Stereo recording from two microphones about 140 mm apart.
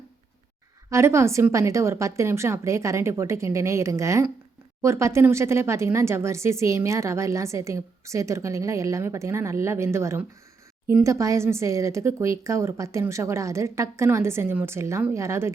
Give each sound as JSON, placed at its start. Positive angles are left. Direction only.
{"t": 0.9, "sound": "speech", "side_deg": -20}